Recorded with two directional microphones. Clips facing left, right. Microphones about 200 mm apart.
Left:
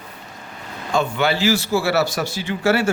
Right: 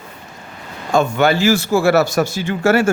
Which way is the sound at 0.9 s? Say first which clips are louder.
Right 5 dB; 45° right (ahead or behind).